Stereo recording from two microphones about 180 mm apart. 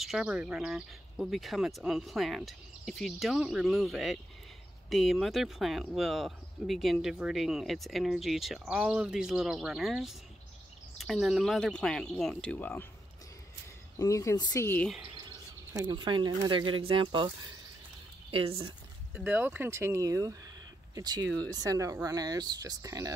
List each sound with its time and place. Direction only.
0.0 s speech: 5° right (ahead or behind)
13.9 s speech: 15° left (ahead or behind)
15.1 s speech: 20° right (ahead or behind)
18.3 s speech: 30° right (ahead or behind)
19.1 s speech: 10° right (ahead or behind)